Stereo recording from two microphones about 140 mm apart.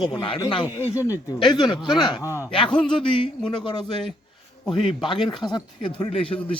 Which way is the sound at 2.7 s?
5° left (ahead or behind).